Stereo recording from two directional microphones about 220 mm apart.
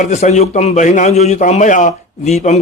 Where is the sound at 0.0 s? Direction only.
30° left (ahead or behind).